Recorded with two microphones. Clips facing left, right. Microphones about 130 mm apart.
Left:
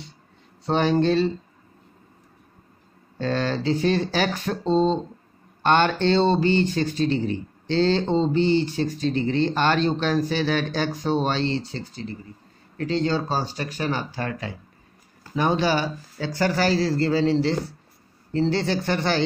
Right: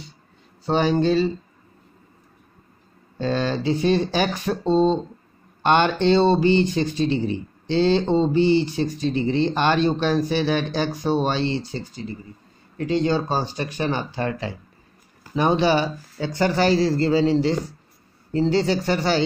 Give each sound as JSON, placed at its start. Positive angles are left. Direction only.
{"t": 0.7, "sound": "speech", "side_deg": -5}
{"t": 3.2, "sound": "a man's voice", "side_deg": -15}
{"t": 5.6, "sound": "a man's voice", "side_deg": -15}